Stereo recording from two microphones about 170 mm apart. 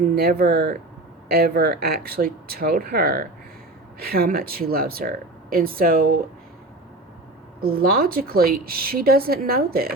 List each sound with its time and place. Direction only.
0.2 s a woman's voice: 65° right (ahead or behind)
7.6 s a woman's voice: 60° right (ahead or behind)